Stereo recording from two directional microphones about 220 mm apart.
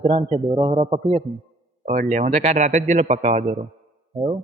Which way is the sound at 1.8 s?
35° right (ahead or behind).